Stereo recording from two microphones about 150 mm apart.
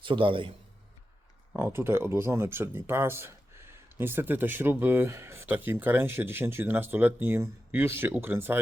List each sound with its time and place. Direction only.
0.0 s a man's voice: 35° right (ahead or behind)
1.5 s speech: 15° right (ahead or behind)